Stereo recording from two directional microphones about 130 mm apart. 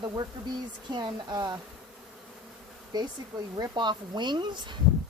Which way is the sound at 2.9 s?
30° right (ahead or behind).